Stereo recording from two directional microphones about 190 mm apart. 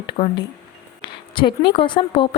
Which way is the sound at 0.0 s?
20° left (ahead or behind).